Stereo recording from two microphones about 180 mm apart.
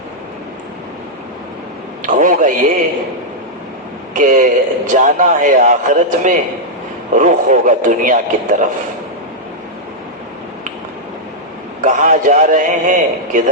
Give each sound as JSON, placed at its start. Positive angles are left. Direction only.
{"t": 2.0, "sound": "a man's voice", "side_deg": -45}
{"t": 4.1, "sound": "a man's voice", "side_deg": -45}
{"t": 11.8, "sound": "a man's voice", "side_deg": -45}